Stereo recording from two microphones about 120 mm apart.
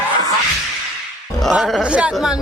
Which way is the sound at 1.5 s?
Centre (ahead or behind).